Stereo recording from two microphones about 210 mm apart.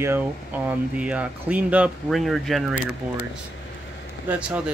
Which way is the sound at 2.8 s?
90° left.